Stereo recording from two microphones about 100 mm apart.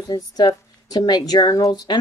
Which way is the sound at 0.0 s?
40° left (ahead or behind).